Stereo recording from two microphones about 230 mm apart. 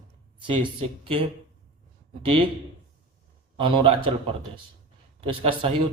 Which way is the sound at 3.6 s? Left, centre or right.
Right.